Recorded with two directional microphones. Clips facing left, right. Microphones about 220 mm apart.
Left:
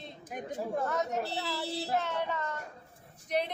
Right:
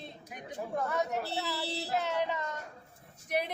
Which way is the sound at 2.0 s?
15° right (ahead or behind).